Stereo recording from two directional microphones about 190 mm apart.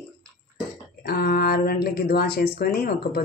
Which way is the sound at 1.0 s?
55° left (ahead or behind).